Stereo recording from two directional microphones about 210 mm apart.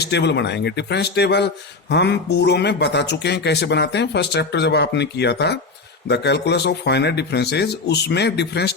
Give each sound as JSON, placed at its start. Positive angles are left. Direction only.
{"t": 0.0, "sound": "speech", "side_deg": 55}